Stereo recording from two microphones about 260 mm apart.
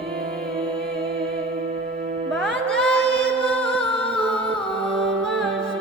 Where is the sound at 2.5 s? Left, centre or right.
Right.